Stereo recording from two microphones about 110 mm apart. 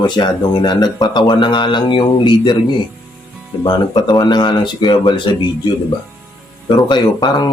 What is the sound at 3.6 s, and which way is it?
Speech, 45° left (ahead or behind).